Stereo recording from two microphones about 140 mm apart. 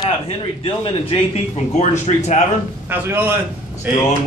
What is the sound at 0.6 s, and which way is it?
Speech, 40° left (ahead or behind).